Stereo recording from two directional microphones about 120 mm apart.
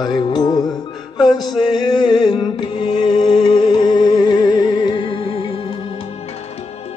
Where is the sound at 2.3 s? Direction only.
40° left (ahead or behind).